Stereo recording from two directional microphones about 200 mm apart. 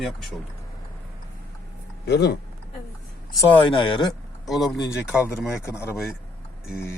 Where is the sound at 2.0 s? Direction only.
55° left (ahead or behind).